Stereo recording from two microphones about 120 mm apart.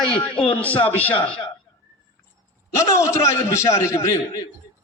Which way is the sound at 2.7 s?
25° left (ahead or behind).